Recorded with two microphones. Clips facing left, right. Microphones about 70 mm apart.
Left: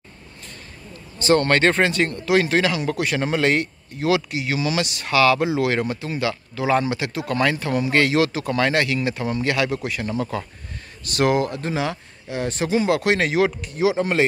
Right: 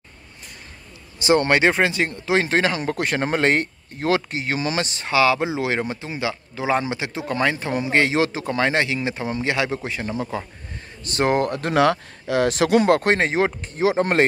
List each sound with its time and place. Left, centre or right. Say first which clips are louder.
1.2 s speech: even; centre
11.3 s speech: right 3 dB; right
12.9 s speech: right 1 dB; right